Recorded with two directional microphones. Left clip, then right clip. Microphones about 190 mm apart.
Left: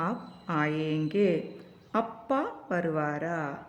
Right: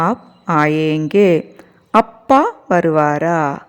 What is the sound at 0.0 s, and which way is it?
A woman's voice, 45° right (ahead or behind).